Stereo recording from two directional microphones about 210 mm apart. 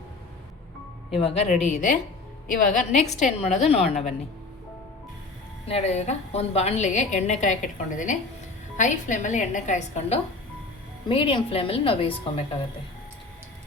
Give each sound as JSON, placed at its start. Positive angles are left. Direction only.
{"t": 1.2, "sound": "a woman's voice", "side_deg": 30}
{"t": 5.6, "sound": "a woman's voice", "side_deg": 30}